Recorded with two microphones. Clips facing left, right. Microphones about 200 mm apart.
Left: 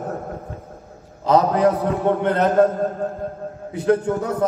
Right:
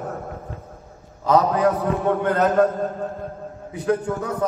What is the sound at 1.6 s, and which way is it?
Speech, 20° left (ahead or behind).